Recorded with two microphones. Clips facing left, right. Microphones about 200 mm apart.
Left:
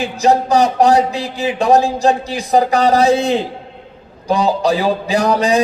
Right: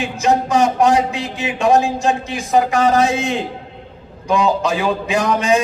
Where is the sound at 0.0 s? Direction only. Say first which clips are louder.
Left 3 dB; 35° left (ahead or behind).